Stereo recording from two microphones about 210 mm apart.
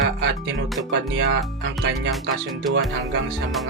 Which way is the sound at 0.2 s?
55° right (ahead or behind).